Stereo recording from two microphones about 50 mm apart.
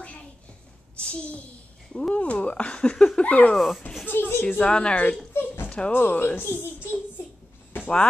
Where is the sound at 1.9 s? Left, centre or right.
Centre.